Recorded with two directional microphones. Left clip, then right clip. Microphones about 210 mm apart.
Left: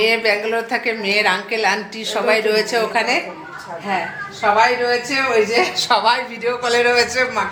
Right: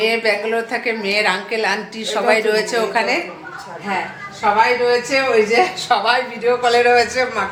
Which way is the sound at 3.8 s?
20° left (ahead or behind).